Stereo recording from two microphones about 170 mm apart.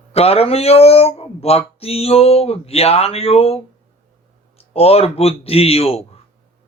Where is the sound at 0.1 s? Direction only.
35° left (ahead or behind).